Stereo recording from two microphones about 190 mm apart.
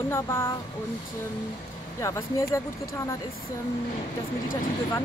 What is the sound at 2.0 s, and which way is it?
Speech, 15° left (ahead or behind).